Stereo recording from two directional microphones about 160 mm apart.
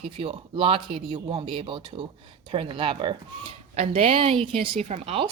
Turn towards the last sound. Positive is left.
turn(degrees=-35)  # may be behind; listen again after turning